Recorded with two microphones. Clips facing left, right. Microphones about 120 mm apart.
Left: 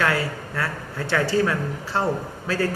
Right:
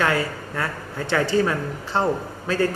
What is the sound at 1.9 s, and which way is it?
Speech, 25° right (ahead or behind).